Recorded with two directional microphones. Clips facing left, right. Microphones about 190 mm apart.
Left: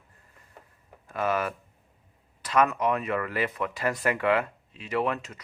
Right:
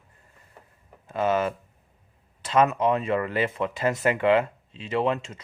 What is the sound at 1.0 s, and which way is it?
Speech, 25° right (ahead or behind).